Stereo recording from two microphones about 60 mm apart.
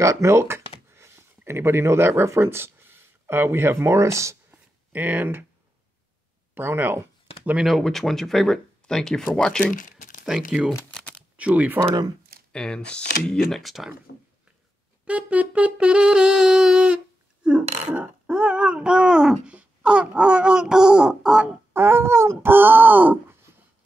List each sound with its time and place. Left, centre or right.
0.0 s speech: right
4.5 s a sound: right
6.5 s speech: right
7.6 s speech: centre
10.2 s speech: centre
11.3 s speech: right
12.5 s speech: centre
15.0 s music: right
18.2 s speech: centre
21.7 s speech: right
23.5 s writing: right